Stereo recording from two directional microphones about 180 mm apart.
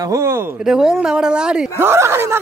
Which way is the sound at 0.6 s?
5° right (ahead or behind).